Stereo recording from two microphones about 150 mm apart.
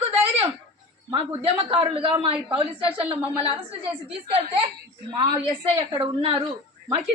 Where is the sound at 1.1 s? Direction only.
40° right (ahead or behind).